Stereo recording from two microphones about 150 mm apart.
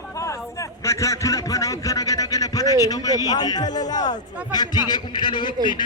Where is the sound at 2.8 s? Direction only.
25° left (ahead or behind).